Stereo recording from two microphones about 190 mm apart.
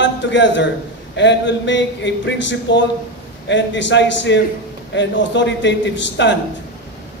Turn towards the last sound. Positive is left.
turn(degrees=70)  # may be behind; listen again after turning